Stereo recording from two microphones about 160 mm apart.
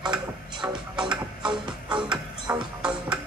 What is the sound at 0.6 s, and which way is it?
Music, 30° right (ahead or behind).